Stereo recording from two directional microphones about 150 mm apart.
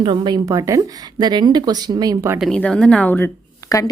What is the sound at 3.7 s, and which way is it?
Speech, 20° left (ahead or behind).